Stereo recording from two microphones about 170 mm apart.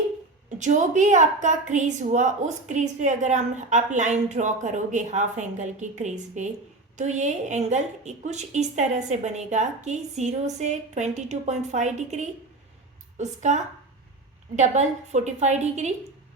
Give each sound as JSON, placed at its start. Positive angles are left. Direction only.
{"t": 0.6, "sound": "a woman's voice", "side_deg": -45}